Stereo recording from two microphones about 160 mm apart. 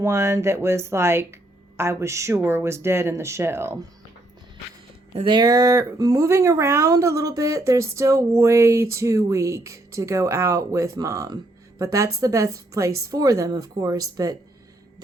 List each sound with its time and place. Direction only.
0.0 s speech: 15° right (ahead or behind)
5.1 s speech: 30° right (ahead or behind)